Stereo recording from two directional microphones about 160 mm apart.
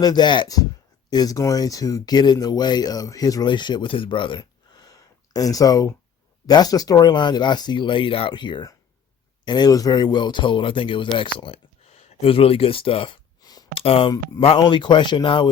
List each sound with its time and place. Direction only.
0.0 s speech: 25° left (ahead or behind)
13.7 s speech: 35° left (ahead or behind)